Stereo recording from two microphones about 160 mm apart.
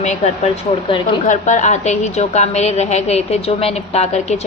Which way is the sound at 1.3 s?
50° left (ahead or behind).